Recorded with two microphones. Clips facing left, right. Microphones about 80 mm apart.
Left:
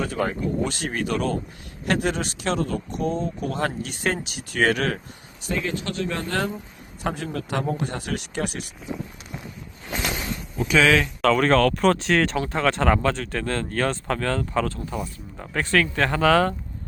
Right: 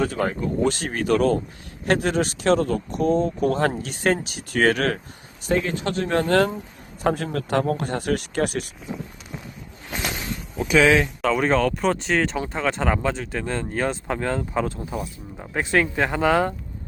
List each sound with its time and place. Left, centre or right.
0.0 s speech: right
10.7 s speech: centre
11.2 s speech: centre
14.9 s speech: centre
15.5 s speech: centre